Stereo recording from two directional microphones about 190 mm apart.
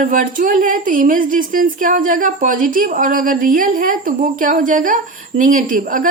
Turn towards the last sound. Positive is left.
turn(degrees=-45)  # may be behind; listen again after turning